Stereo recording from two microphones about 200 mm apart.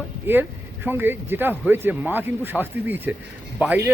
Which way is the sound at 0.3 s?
10° right (ahead or behind).